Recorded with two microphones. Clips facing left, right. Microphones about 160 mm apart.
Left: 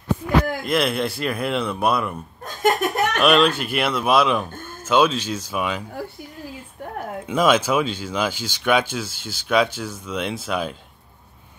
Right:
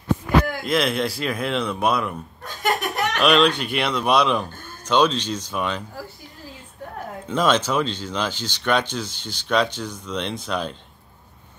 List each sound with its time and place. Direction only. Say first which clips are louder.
0.7 s a man's voice: even; centre (ahead or behind)
2.4 s laughter: left 4 dB; 45° left (ahead or behind)
3.2 s a man's voice: even; 5° left (ahead or behind)
7.2 s speech: left 2 dB; 10° left (ahead or behind)